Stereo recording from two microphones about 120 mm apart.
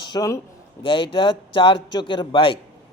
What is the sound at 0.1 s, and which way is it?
Speech, 30° left (ahead or behind).